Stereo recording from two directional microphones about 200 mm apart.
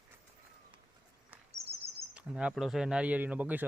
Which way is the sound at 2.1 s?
5° right (ahead or behind).